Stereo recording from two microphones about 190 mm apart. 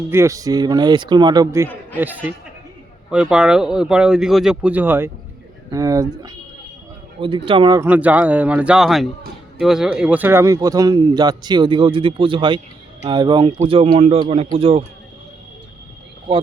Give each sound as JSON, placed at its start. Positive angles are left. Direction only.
{"t": 0.1, "sound": "a man's voice", "side_deg": -15}
{"t": 7.8, "sound": "a man's voice", "side_deg": -10}